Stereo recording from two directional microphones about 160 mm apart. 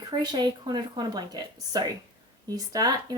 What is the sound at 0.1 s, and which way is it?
Speech, 25° right (ahead or behind).